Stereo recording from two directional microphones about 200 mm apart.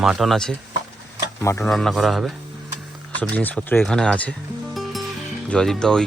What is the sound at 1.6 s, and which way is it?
Speech, centre (ahead or behind).